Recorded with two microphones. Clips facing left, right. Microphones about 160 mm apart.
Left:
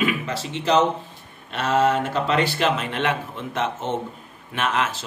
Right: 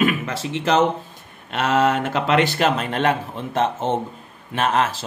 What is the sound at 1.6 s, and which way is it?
Speech, 70° right (ahead or behind).